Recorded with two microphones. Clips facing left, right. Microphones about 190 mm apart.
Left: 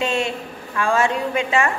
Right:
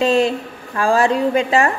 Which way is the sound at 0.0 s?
35° right (ahead or behind).